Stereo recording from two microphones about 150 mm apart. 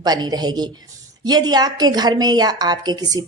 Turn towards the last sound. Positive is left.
turn(degrees=-25)  # may be behind; listen again after turning